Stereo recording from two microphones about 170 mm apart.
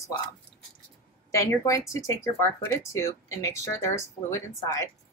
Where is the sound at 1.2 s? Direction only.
20° left (ahead or behind).